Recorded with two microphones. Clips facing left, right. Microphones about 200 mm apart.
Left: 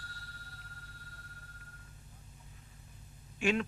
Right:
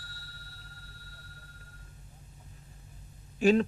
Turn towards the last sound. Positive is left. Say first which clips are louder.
# right 8 dB
turn(degrees=-35)  # may be behind; listen again after turning